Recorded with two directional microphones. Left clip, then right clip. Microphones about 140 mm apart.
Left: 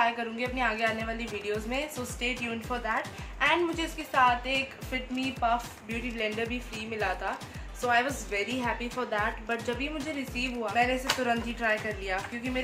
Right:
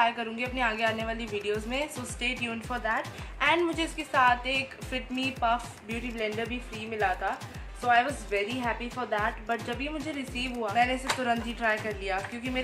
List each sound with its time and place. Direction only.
0.0 s a woman's voice: 20° right (ahead or behind)